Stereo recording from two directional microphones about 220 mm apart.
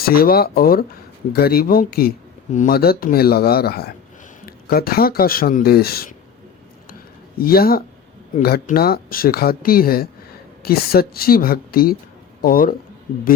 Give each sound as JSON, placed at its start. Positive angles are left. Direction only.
{"t": 0.0, "sound": "speech", "side_deg": 45}
{"t": 7.3, "sound": "speech", "side_deg": 45}